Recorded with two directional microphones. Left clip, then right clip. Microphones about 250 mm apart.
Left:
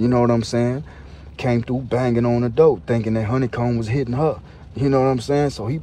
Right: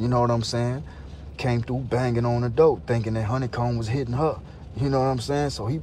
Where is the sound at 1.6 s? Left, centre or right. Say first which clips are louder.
Left 5 dB; left.